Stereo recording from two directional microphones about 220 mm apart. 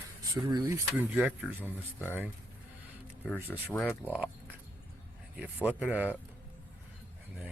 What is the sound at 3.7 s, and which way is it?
Speech, 5° left (ahead or behind).